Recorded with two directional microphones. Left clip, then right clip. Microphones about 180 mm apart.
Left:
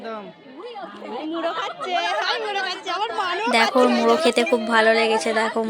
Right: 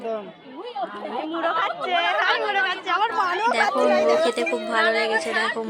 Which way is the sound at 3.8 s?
30° left (ahead or behind).